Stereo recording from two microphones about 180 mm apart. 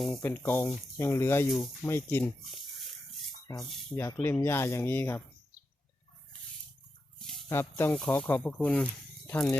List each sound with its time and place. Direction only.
0.2 s speech: 10° left (ahead or behind)
3.6 s speech: centre (ahead or behind)
3.9 s speech: 15° left (ahead or behind)
7.2 s a sound: 5° left (ahead or behind)
7.5 s speech: 15° left (ahead or behind)